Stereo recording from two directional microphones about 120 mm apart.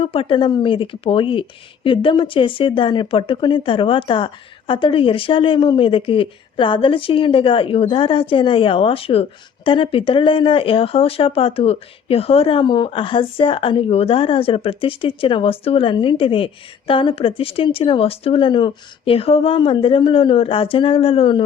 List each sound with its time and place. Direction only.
0.0 s speech: 50° left (ahead or behind)